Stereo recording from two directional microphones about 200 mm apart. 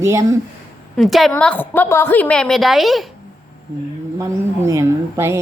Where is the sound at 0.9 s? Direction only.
Centre (ahead or behind).